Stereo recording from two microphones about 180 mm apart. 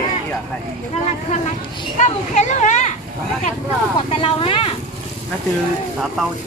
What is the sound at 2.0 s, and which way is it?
Speech, 40° left (ahead or behind).